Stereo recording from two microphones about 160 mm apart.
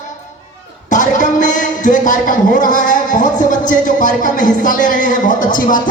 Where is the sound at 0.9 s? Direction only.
50° left (ahead or behind).